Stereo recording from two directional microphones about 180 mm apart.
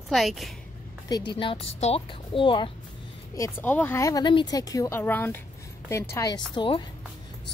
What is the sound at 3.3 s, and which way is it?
Speech, 15° left (ahead or behind).